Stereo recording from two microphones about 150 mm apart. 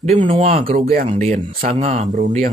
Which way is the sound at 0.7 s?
75° right (ahead or behind).